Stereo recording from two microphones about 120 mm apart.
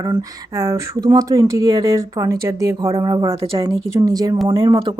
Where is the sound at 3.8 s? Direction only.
30° right (ahead or behind).